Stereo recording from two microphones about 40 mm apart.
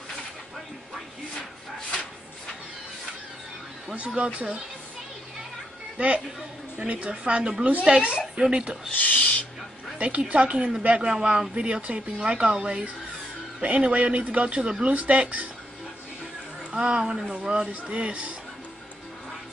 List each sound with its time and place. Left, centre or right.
3.9 s speech: right
5.9 s speech: right
8.9 s speech: left
9.9 s speech: right
11.1 s speech: right
11.5 s speech: right
14.9 s speech: right
16.7 s a woman's voice: right